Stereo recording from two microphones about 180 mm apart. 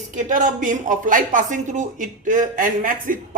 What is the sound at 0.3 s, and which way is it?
Speech, 45° right (ahead or behind).